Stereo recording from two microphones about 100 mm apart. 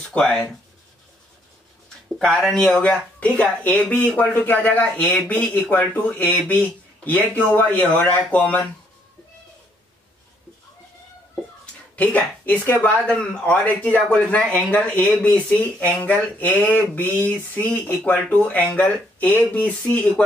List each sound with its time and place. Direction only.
0.1 s speech: 10° left (ahead or behind)
2.1 s speech: 5° left (ahead or behind)
11.9 s speech: 15° left (ahead or behind)